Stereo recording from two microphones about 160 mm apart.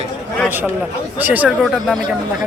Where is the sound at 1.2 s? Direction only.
10° right (ahead or behind).